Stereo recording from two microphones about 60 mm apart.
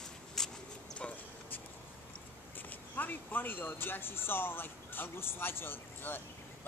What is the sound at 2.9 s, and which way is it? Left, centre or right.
Speech, left.